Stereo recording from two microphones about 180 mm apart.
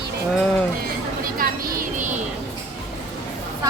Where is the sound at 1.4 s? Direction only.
50° right (ahead or behind).